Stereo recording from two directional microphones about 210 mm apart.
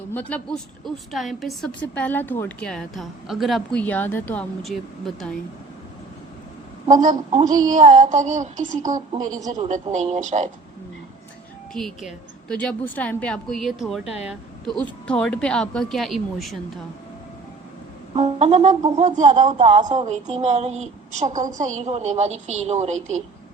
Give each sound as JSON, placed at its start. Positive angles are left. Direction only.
{"t": 0.1, "sound": "a woman's voice", "side_deg": 5}
{"t": 6.9, "sound": "a woman's voice", "side_deg": -35}
{"t": 7.3, "sound": "speech", "side_deg": -20}
{"t": 7.7, "sound": "a woman's voice", "side_deg": -35}
{"t": 9.0, "sound": "a woman's voice", "side_deg": -15}
{"t": 9.9, "sound": "a woman's voice", "side_deg": -35}
{"t": 11.7, "sound": "a woman's voice", "side_deg": 0}
{"t": 18.1, "sound": "a woman's voice", "side_deg": -30}